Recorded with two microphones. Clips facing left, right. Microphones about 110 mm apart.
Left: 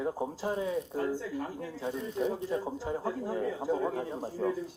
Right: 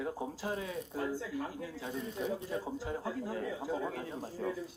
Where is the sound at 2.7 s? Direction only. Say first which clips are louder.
Left 4 dB; 30° left (ahead or behind).